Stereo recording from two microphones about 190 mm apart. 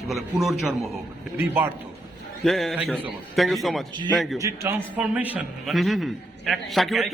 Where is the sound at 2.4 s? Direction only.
Centre (ahead or behind).